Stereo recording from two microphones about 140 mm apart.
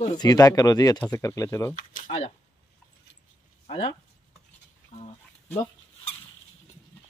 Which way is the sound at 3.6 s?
45° left (ahead or behind).